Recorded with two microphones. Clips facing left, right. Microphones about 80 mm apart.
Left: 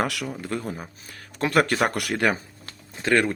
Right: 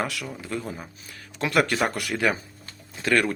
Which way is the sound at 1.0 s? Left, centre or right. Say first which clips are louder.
Left 3 dB; left.